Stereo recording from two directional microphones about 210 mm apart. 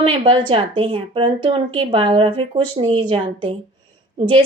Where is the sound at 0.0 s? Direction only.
25° right (ahead or behind).